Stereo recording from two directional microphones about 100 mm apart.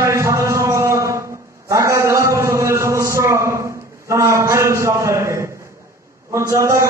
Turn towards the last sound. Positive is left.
turn(degrees=-30)  # may be behind; listen again after turning